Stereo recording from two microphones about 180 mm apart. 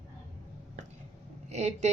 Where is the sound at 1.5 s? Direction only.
40° right (ahead or behind).